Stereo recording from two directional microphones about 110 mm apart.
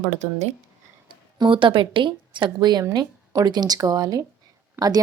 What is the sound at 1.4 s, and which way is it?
A woman's voice, 50° right (ahead or behind).